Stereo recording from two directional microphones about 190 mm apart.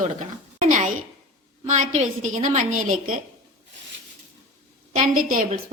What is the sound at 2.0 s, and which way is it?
A woman's voice, 40° right (ahead or behind).